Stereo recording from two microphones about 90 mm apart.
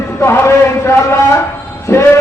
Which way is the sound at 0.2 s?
30° left (ahead or behind).